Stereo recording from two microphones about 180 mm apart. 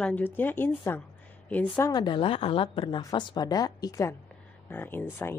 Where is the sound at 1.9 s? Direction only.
25° left (ahead or behind).